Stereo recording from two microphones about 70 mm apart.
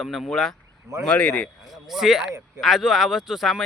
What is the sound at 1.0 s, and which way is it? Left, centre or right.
Speech, centre.